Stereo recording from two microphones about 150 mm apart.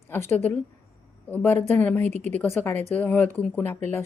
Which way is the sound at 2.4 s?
15° left (ahead or behind).